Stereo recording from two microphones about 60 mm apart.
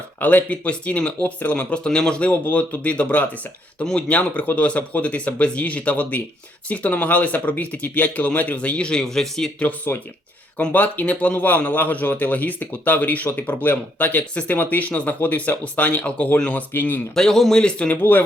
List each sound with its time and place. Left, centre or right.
0.2 s speech: left; by 9.5 s centre
9.6 s speech: left
17.2 s a man's voice: centre
17.6 s speech: centre